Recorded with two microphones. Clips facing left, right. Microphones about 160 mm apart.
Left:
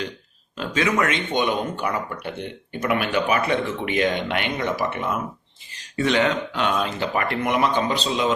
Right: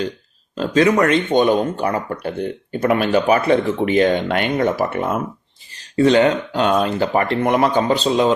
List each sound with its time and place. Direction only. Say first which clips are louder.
0.5 s speech: right 8 dB; 35° right (ahead or behind)
6.0 s speech: right 7 dB; 35° right (ahead or behind)